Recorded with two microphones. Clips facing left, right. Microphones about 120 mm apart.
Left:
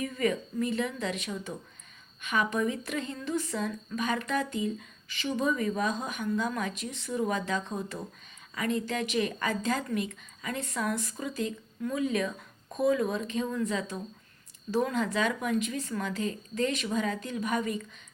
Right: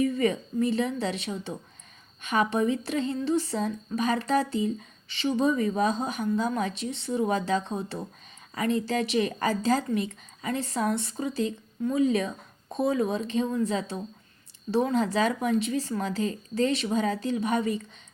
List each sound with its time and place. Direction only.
0.0 s a woman's voice: 30° right (ahead or behind)